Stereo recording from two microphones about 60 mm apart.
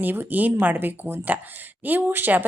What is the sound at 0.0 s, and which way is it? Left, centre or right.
A woman's voice, right.